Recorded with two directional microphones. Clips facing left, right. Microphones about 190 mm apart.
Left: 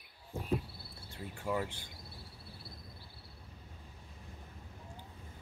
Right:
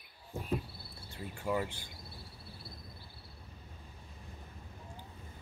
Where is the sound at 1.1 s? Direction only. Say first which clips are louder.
Right 1 dB; 10° right (ahead or behind).